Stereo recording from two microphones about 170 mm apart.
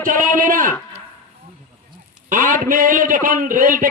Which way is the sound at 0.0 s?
55° right (ahead or behind).